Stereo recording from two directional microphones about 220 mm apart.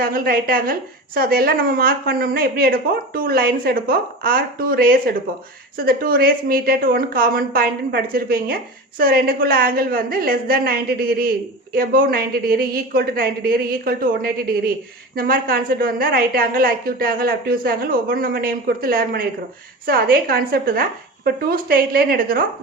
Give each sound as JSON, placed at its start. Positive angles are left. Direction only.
{"t": 0.0, "sound": "a woman's voice", "side_deg": -40}